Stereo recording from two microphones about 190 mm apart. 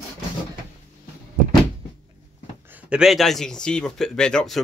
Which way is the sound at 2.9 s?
Centre (ahead or behind).